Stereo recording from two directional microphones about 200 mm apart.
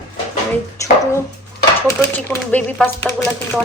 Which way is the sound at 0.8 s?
15° left (ahead or behind).